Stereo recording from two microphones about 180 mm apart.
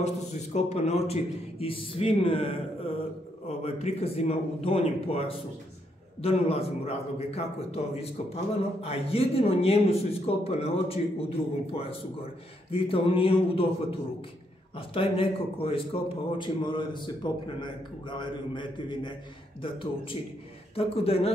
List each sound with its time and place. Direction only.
0.0 s speech: 40° left (ahead or behind)
15.0 s a man's voice: 30° left (ahead or behind)